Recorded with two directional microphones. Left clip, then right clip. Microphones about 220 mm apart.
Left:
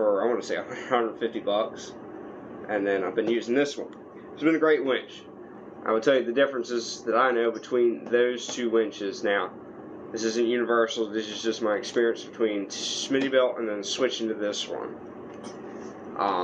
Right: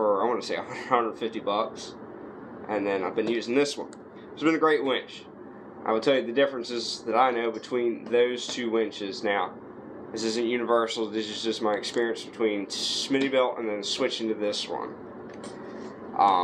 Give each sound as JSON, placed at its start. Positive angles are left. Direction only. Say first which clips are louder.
{"t": 0.2, "sound": "speech", "louder": "left 1 dB", "side_deg": -35}
{"t": 2.7, "sound": "speech", "louder": "left 1 dB", "side_deg": -35}